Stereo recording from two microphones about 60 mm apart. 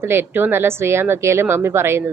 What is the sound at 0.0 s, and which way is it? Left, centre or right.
A woman's voice, right.